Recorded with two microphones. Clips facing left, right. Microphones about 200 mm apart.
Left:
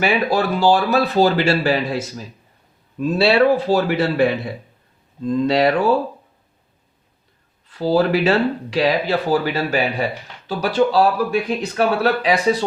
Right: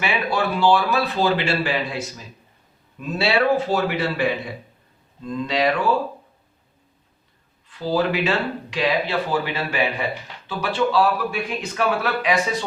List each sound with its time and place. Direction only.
0.0 s speech: 40° left (ahead or behind)
5.5 s speech: 40° left (ahead or behind)
7.7 s speech: 40° left (ahead or behind)